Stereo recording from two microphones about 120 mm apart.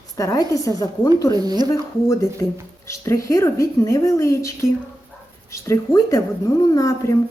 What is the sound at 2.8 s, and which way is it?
Speech, 25° left (ahead or behind).